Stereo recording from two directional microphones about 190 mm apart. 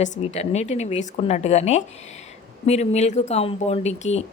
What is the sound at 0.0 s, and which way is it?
Speech, 40° left (ahead or behind).